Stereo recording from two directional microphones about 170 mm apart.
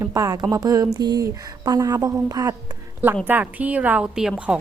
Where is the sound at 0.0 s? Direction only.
20° right (ahead or behind).